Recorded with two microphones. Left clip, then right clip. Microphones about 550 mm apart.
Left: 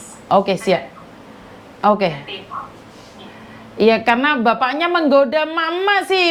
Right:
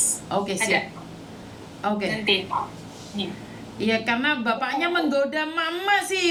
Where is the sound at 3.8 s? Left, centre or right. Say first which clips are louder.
Left 11 dB; left.